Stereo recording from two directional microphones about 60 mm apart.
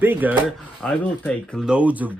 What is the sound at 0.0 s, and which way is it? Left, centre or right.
Speech, right.